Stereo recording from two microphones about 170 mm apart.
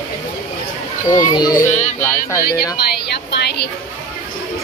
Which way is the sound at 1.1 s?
25° left (ahead or behind).